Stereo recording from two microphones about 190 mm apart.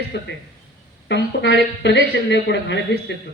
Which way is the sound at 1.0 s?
65° left (ahead or behind).